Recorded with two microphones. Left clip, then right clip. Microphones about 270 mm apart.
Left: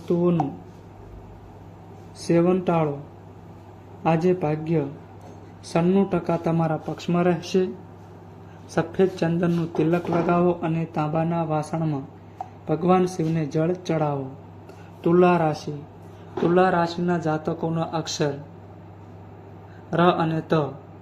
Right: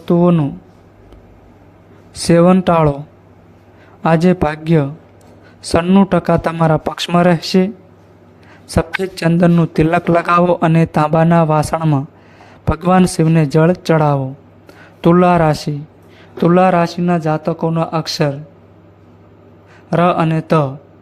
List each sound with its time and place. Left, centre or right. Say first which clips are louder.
0.0 s speech: right 9 dB; right
2.2 s speech: right 10 dB; right
4.0 s speech: right 8 dB; right
9.1 s speech: right 10 dB; right
19.9 s speech: right 7 dB; right